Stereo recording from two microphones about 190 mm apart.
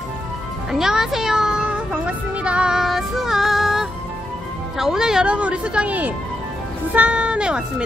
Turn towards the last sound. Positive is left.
turn(degrees=-5)  # may be behind; listen again after turning